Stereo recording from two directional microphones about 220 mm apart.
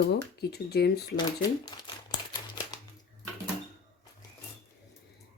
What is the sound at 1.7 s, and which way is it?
Crumpling, 20° left (ahead or behind).